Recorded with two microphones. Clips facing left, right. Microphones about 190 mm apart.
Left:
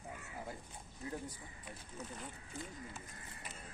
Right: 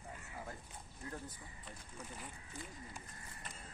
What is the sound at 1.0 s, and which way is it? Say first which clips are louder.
Speech: left 4 dB; 20° left (ahead or behind).